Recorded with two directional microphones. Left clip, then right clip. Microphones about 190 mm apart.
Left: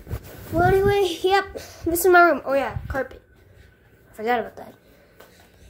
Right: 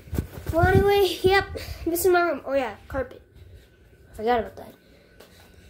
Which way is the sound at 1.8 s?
15° left (ahead or behind).